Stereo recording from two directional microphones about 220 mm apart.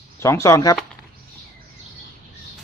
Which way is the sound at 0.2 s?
15° left (ahead or behind).